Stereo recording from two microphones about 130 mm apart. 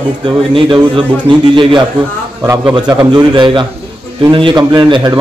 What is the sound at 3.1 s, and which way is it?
Speech, 35° right (ahead or behind).